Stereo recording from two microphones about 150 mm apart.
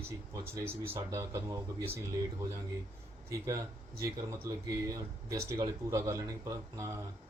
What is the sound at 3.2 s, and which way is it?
Speech, 20° right (ahead or behind).